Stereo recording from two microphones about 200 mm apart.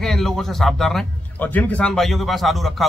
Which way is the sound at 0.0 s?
Centre (ahead or behind).